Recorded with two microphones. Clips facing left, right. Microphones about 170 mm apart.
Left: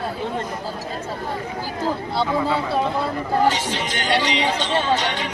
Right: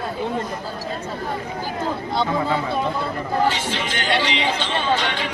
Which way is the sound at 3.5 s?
45° left (ahead or behind).